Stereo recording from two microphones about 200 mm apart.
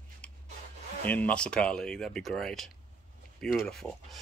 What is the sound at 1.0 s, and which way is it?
Speech, 5° left (ahead or behind).